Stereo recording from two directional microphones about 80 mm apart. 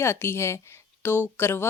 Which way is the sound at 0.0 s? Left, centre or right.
Left.